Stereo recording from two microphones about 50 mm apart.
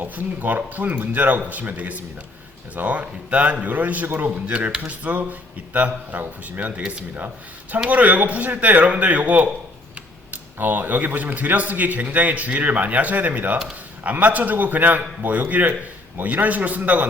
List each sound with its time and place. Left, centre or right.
0.0 s speech: right
4.4 s speech: right